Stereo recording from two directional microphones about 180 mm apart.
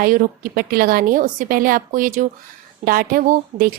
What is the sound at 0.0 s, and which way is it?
Speech, 50° right (ahead or behind).